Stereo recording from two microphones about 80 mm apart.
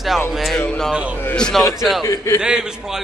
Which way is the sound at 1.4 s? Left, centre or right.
Centre.